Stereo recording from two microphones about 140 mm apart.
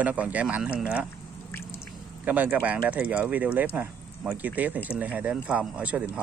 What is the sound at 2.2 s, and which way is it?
Speech, 10° right (ahead or behind).